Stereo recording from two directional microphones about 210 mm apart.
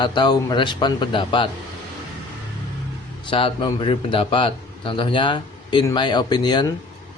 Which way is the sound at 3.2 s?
25° left (ahead or behind).